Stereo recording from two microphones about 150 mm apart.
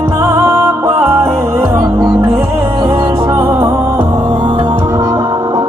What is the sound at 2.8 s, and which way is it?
Music, 25° right (ahead or behind).